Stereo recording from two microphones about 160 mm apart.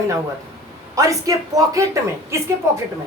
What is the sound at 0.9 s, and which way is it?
Speech, 20° right (ahead or behind).